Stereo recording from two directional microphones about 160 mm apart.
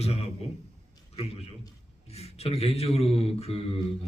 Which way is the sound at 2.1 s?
40° left (ahead or behind).